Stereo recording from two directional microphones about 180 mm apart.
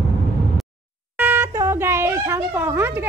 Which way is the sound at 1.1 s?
10° right (ahead or behind).